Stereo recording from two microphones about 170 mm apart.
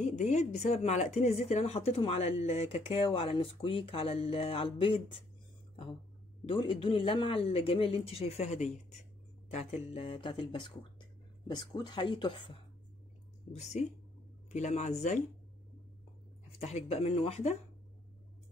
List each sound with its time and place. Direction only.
0.0 s speech: 45° left (ahead or behind)
6.4 s speech: 30° left (ahead or behind)
13.5 s speech: 40° left (ahead or behind)
16.5 s speech: 35° left (ahead or behind)